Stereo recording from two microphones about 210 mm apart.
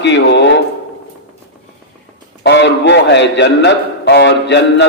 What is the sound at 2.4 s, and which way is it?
A man's voice, 55° left (ahead or behind).